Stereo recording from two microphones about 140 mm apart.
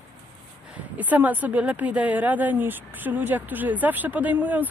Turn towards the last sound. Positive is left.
turn(degrees=-10)  # may be behind; listen again after turning